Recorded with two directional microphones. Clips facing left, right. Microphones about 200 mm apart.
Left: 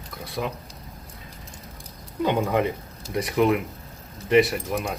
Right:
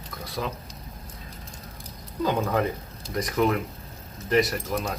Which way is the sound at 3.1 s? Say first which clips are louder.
Left 3 dB; 10° left (ahead or behind).